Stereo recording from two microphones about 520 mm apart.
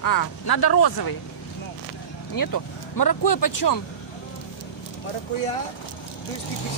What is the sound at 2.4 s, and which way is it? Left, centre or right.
Speech, left.